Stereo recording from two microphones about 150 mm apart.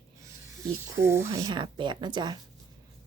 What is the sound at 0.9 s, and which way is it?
A woman's voice, 15° right (ahead or behind).